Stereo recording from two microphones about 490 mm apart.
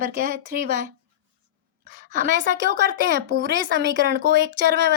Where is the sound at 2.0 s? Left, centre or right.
Centre.